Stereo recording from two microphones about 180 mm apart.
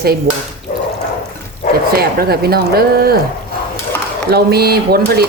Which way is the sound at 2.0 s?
60° right (ahead or behind).